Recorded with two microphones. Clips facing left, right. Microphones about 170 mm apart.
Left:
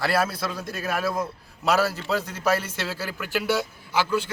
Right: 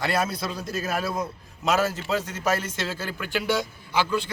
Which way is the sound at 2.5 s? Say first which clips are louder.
Even; 10° left (ahead or behind).